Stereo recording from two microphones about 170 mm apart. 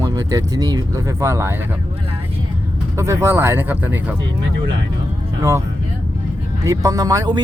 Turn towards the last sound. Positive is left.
turn(degrees=-25)  # may be behind; listen again after turning